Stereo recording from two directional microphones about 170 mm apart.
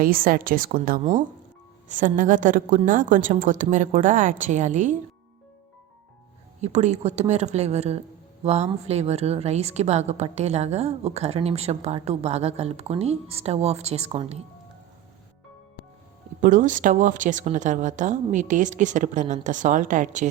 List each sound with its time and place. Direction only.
0.0 s a woman's voice: 55° right (ahead or behind)
6.6 s a woman's voice: 40° right (ahead or behind)
16.4 s a woman's voice: 50° right (ahead or behind)